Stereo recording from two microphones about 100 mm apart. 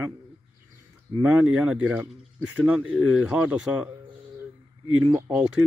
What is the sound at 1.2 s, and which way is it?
Speech, 15° right (ahead or behind).